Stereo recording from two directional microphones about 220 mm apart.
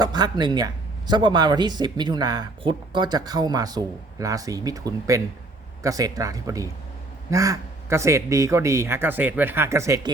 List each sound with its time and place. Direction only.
0.0 s speech: 20° right (ahead or behind)